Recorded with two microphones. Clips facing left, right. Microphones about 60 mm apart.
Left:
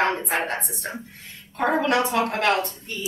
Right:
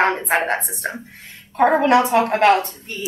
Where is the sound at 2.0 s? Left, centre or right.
Right.